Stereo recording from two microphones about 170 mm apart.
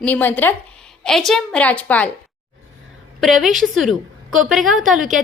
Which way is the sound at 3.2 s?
Centre (ahead or behind).